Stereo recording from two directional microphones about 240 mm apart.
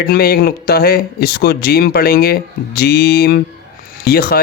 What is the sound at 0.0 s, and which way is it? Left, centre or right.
Speech, left.